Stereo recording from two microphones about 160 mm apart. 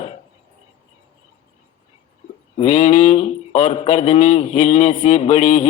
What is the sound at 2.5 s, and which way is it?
A man's voice, 50° left (ahead or behind).